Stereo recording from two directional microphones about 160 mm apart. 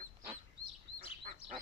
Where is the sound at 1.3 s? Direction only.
60° right (ahead or behind).